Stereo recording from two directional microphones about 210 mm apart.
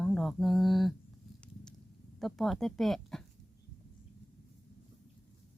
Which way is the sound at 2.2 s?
Centre (ahead or behind).